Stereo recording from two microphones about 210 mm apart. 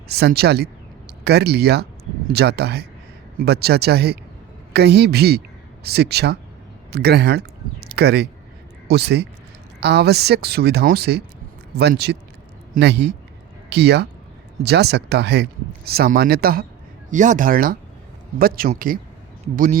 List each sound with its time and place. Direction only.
0.1 s a man's voice: 50° right (ahead or behind)